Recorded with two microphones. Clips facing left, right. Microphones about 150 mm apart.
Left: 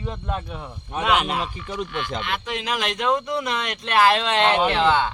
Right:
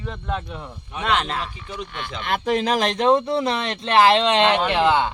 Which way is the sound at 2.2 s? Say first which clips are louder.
Right 7 dB; 40° right (ahead or behind).